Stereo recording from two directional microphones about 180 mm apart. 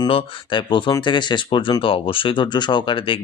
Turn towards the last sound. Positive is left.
turn(degrees=30)  # may be behind; listen again after turning